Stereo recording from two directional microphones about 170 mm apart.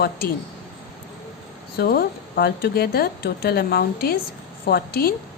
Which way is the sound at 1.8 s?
65° left (ahead or behind).